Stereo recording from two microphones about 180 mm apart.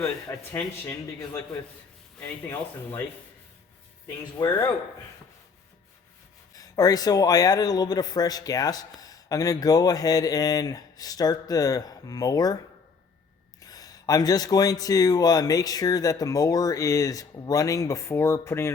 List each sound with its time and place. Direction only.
0.0 s a man's voice: 15° left (ahead or behind)
4.4 s speech: 25° left (ahead or behind)
6.5 s speech: 20° left (ahead or behind)
13.6 s speech: 20° left (ahead or behind)